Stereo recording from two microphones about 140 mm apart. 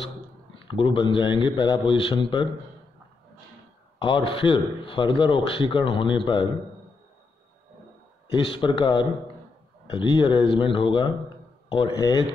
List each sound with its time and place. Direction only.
0.6 s a man's voice: 35° left (ahead or behind)
4.0 s a man's voice: 35° left (ahead or behind)
8.3 s a man's voice: 40° left (ahead or behind)